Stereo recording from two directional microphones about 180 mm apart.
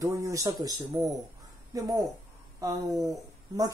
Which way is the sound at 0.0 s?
15° right (ahead or behind).